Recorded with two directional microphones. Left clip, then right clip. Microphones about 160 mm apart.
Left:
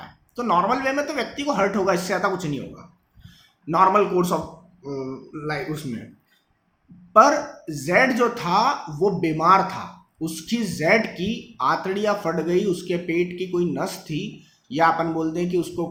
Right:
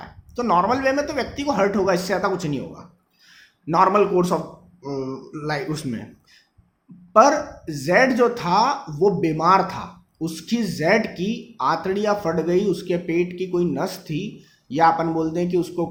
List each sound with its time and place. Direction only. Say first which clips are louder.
0.3 s speech: right 1 dB; 15° right (ahead or behind)
3.7 s speech: right 1 dB; 20° right (ahead or behind)
7.1 s speech: even; 15° right (ahead or behind)